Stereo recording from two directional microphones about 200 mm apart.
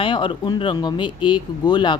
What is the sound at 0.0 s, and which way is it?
Speech, 25° left (ahead or behind).